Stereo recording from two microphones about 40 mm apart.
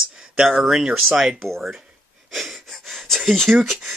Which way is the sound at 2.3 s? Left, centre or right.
Centre.